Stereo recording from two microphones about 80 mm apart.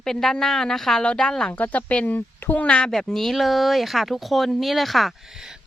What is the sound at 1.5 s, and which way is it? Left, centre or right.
Speech, left.